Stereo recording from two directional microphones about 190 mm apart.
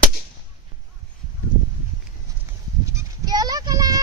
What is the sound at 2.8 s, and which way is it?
Sheep, 20° right (ahead or behind).